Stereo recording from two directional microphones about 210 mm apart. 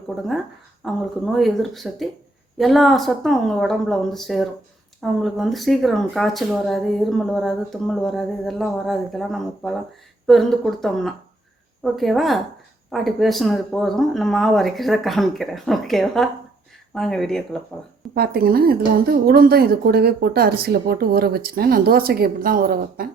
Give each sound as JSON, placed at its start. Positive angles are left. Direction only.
{"t": 0.9, "sound": "speech", "side_deg": 0}
{"t": 18.1, "sound": "a woman's voice", "side_deg": -45}